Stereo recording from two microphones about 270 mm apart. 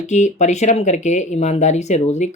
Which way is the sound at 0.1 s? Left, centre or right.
Left.